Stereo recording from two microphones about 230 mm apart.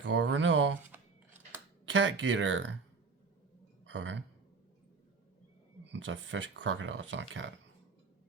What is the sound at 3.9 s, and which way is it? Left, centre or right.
Speech, right.